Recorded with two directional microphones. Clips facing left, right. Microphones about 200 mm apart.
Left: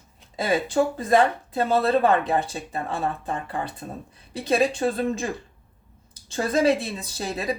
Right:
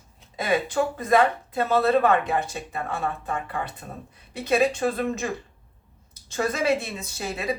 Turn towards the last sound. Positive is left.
turn(degrees=35)  # may be behind; listen again after turning